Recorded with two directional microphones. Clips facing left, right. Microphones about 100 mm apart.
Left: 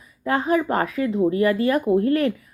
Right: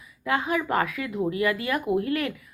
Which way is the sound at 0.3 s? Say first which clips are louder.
Left 5 dB; 35° left (ahead or behind).